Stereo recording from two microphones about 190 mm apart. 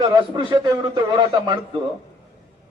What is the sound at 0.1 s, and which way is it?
A man's voice, 25° right (ahead or behind).